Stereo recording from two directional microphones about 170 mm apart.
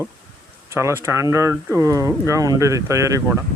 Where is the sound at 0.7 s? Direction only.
15° right (ahead or behind).